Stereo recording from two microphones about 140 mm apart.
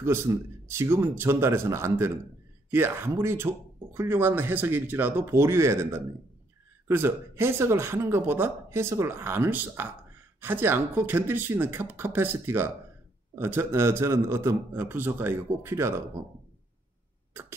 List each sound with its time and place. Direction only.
0.0 s a man's voice: 20° right (ahead or behind)
17.3 s cough: 15° right (ahead or behind)